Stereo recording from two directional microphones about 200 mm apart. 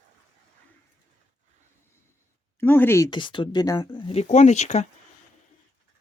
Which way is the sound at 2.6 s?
10° left (ahead or behind).